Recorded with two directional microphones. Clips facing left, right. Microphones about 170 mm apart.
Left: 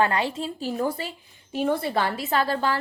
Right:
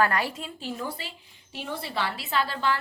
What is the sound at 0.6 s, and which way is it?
A woman's voice, 45° left (ahead or behind).